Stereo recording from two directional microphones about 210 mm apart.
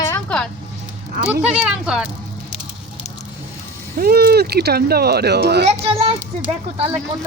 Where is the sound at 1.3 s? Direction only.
5° right (ahead or behind).